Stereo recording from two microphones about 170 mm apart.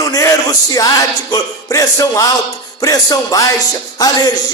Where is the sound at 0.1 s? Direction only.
20° left (ahead or behind).